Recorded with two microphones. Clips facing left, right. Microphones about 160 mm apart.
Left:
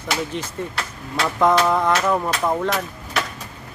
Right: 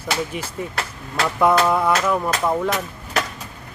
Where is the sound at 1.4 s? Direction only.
5° right (ahead or behind).